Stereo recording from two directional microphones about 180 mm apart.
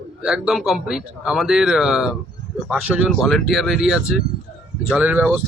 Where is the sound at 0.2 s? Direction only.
5° right (ahead or behind).